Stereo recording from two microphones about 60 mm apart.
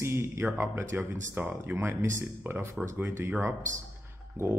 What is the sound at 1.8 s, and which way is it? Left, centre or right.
Speech, right.